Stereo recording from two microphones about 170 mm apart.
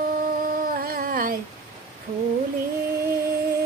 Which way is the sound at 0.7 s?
60° right (ahead or behind).